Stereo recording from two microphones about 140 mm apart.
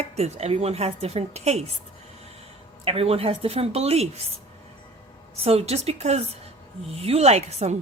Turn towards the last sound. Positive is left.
turn(degrees=-50)  # may be behind; listen again after turning